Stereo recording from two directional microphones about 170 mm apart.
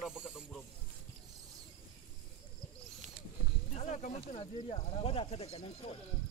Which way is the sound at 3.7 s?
45° left (ahead or behind).